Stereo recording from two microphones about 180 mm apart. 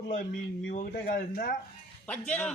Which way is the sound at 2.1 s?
5° left (ahead or behind).